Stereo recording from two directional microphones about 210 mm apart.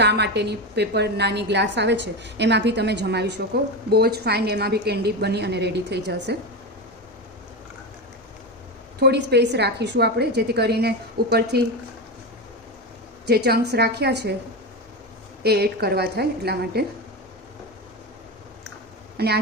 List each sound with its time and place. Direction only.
0.0 s a woman's voice: 55° right (ahead or behind)
9.0 s a woman's voice: 50° right (ahead or behind)
13.2 s a woman's voice: 50° right (ahead or behind)
15.4 s a woman's voice: 50° right (ahead or behind)
19.1 s speech: 50° right (ahead or behind)